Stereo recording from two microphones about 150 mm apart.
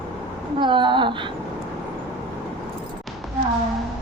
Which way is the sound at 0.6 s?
30° right (ahead or behind).